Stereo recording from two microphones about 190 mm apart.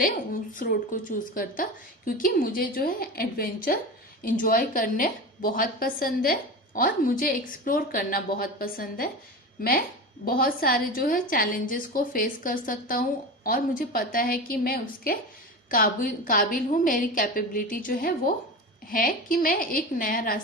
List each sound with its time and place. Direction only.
0.5 s a woman's voice: 45° left (ahead or behind)